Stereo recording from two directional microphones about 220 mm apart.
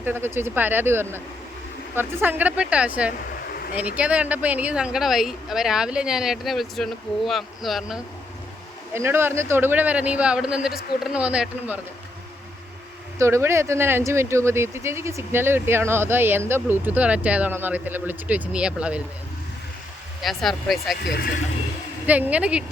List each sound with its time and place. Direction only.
0.0 s speech: 10° right (ahead or behind)
13.1 s speech: 10° right (ahead or behind)
20.2 s speech: centre (ahead or behind)
21.0 s speech: 45° left (ahead or behind)
22.0 s speech: 5° right (ahead or behind)